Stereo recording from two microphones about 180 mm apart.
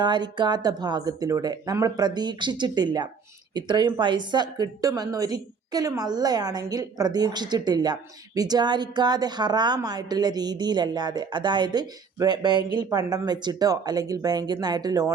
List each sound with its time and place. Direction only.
0.0 s a woman's voice: 25° right (ahead or behind)